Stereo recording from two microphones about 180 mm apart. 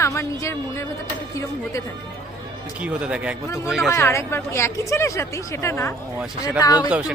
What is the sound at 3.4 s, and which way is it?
Speech, 15° left (ahead or behind).